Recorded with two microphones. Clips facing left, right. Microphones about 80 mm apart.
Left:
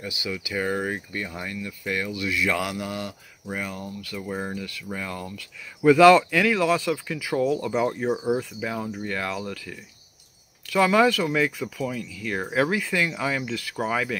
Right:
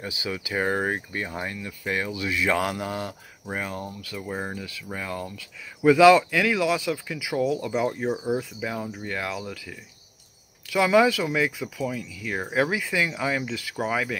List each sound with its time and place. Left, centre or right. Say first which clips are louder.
0.0 s speech: even; right
2.6 s speech: right 1 dB; right
3.4 s speech: right 1 dB; right
4.1 s speech: left 2 dB; centre
8.1 s speech: left 2 dB; centre
8.4 s speech: left 1 dB; centre